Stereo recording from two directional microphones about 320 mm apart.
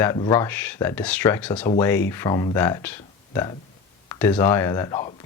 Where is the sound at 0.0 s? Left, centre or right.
Centre.